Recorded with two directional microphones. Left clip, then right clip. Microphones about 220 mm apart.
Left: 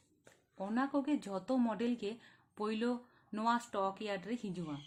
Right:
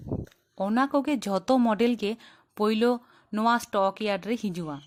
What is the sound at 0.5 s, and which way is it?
Speech, 40° right (ahead or behind).